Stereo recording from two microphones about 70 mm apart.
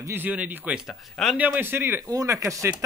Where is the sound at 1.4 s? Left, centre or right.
Right.